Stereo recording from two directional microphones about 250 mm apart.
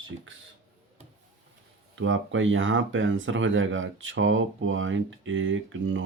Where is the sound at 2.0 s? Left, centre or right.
Right.